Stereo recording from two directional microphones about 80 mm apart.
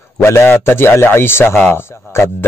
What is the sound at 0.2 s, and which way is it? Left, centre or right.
A man's voice, left.